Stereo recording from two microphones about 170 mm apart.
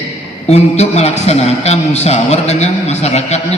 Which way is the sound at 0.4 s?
40° left (ahead or behind).